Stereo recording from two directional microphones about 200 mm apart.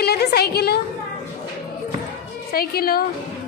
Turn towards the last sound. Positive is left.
turn(degrees=50)  # may be behind; listen again after turning